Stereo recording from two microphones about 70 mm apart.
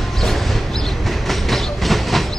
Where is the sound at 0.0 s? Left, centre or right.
Centre.